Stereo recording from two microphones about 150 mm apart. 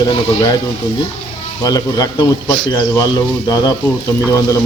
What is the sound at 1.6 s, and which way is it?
Speech, 25° left (ahead or behind).